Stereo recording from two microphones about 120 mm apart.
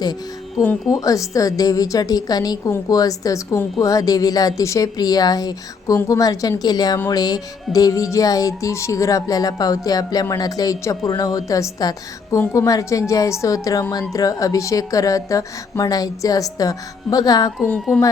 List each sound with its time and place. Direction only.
0.9 s music: 30° left (ahead or behind)
3.8 s a woman's voice: 30° left (ahead or behind)
7.1 s music: 30° left (ahead or behind)